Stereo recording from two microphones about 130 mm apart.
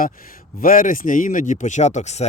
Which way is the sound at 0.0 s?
90° left.